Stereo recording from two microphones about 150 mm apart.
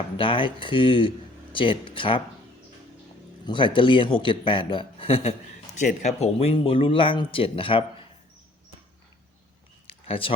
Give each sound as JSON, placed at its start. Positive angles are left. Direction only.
{"t": 0.2, "sound": "speech", "side_deg": 35}
{"t": 3.4, "sound": "speech", "side_deg": 35}
{"t": 5.7, "sound": "speech", "side_deg": 50}
{"t": 9.8, "sound": "a sound", "side_deg": 40}